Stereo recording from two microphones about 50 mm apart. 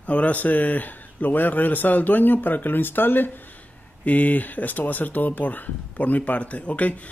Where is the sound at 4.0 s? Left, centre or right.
Left.